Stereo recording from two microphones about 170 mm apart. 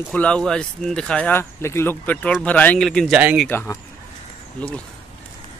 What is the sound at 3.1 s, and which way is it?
Speech, 10° right (ahead or behind).